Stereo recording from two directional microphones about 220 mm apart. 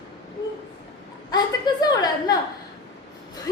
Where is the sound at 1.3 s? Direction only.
20° left (ahead or behind).